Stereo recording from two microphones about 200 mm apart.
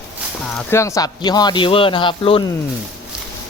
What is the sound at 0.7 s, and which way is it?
Speech, 15° left (ahead or behind).